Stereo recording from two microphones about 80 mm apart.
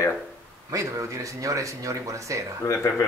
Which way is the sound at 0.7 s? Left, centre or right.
Right.